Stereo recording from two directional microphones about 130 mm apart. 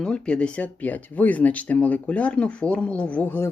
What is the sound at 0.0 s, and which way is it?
Speech, 5° left (ahead or behind).